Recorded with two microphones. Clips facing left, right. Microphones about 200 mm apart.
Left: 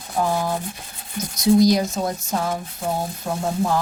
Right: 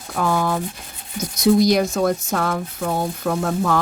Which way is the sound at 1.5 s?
65° right (ahead or behind).